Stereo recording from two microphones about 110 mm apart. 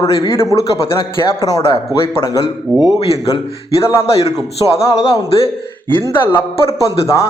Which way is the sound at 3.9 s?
30° left (ahead or behind).